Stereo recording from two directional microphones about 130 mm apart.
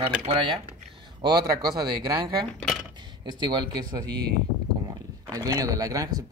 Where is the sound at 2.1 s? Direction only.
35° right (ahead or behind).